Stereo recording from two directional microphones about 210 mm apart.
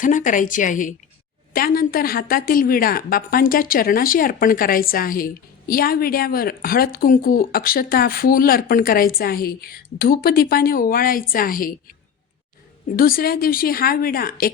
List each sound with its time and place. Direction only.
0.0 s a woman's voice: 40° left (ahead or behind)
13.0 s a woman's voice: 45° left (ahead or behind)